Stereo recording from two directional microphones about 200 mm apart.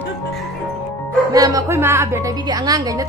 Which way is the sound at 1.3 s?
15° right (ahead or behind).